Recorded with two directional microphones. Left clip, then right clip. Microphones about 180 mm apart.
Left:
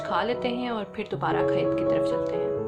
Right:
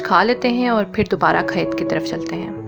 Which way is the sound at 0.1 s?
45° right (ahead or behind).